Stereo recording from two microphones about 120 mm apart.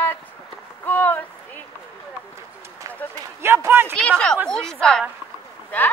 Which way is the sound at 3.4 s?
20° right (ahead or behind).